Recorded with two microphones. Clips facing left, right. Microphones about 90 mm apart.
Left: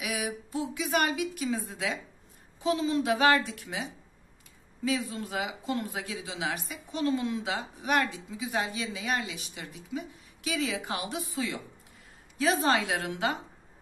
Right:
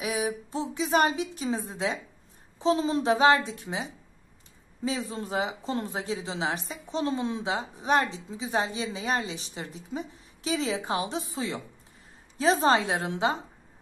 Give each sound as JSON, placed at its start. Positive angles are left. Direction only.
{"t": 0.0, "sound": "a woman's voice", "side_deg": -30}